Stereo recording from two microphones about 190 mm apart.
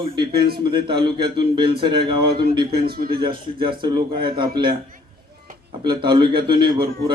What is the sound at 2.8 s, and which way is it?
Speech, 55° right (ahead or behind).